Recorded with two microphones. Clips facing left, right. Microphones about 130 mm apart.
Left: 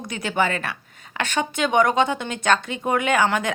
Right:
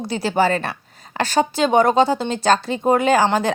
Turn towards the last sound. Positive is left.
turn(degrees=-30)  # may be behind; listen again after turning